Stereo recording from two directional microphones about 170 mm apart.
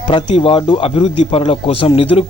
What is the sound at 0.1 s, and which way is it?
Speech, 30° left (ahead or behind).